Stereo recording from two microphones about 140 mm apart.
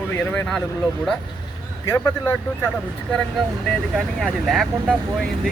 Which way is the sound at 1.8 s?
15° left (ahead or behind).